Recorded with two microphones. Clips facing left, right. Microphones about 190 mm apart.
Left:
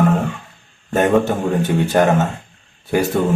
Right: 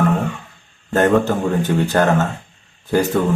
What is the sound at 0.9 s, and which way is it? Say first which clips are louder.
Speech: even; 10° left (ahead or behind).